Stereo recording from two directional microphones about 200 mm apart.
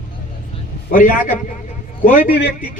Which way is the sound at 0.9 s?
45° left (ahead or behind).